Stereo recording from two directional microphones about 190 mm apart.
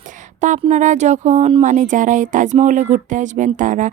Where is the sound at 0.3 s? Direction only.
40° right (ahead or behind).